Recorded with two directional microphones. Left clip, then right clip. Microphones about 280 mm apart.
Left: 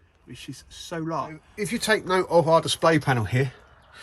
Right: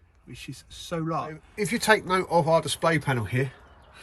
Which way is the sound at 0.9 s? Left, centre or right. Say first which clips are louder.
Even; centre.